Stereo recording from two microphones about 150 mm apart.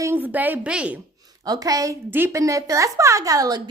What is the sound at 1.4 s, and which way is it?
A woman's voice, 25° right (ahead or behind).